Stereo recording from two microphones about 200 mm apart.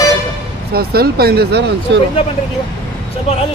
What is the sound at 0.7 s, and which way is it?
Speech, 50° right (ahead or behind).